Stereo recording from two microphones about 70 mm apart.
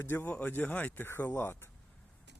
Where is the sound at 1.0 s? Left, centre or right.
Left.